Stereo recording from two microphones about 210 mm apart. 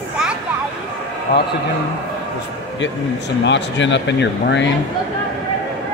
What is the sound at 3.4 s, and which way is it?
Speech, 60° left (ahead or behind).